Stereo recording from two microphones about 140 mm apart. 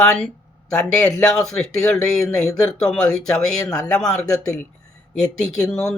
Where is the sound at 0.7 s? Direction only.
5° left (ahead or behind).